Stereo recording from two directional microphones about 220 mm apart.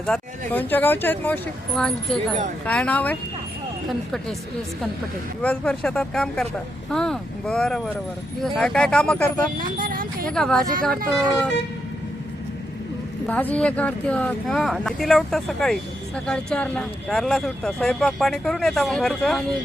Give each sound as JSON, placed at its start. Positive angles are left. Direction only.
{"t": 0.0, "sound": "speech", "side_deg": 5}
{"t": 5.4, "sound": "speech", "side_deg": 5}
{"t": 9.6, "sound": "a sound", "side_deg": -40}
{"t": 10.2, "sound": "speech", "side_deg": 5}
{"t": 13.2, "sound": "speech", "side_deg": 5}